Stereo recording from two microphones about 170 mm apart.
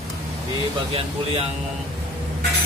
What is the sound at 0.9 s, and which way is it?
Speech, 35° right (ahead or behind).